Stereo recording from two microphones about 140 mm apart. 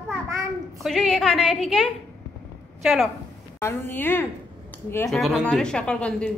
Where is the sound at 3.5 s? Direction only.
15° left (ahead or behind).